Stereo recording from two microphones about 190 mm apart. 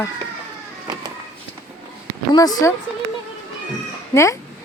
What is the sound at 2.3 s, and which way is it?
Speech, 20° left (ahead or behind).